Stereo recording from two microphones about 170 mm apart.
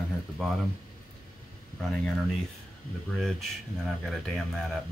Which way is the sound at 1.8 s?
Centre (ahead or behind).